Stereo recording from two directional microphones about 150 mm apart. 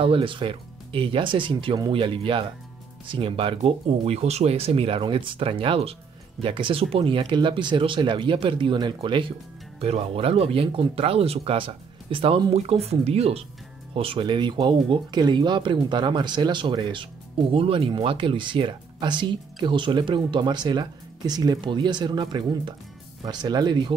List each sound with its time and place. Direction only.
0.0 s speech: 35° right (ahead or behind)